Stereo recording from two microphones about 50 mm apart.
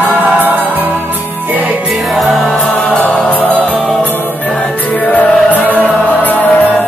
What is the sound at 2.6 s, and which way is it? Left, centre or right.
Music, left.